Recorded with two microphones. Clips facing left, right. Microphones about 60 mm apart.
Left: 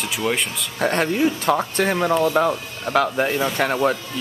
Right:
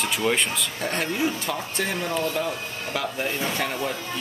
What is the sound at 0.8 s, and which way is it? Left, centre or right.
Speech, left.